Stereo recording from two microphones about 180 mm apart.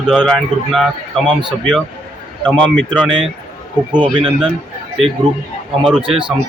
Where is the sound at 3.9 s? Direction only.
25° right (ahead or behind).